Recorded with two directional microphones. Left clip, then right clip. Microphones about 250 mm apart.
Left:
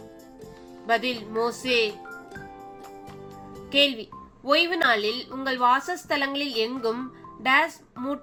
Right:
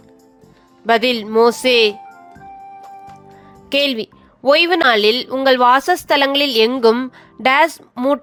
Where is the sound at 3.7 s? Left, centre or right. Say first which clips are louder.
Right 5 dB; right.